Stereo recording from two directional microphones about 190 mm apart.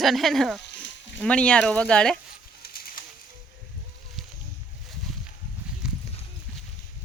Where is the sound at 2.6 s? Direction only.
50° left (ahead or behind).